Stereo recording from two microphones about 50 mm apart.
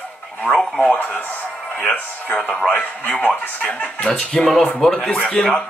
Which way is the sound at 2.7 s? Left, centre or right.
Left.